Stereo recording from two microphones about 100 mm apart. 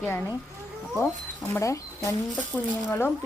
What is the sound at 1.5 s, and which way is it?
Speech, 30° left (ahead or behind).